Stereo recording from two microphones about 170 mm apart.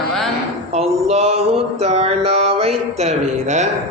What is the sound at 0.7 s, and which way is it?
Mantra, 40° right (ahead or behind).